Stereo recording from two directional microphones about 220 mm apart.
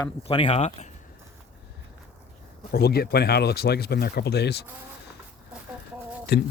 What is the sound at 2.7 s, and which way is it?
Speech, 45° left (ahead or behind).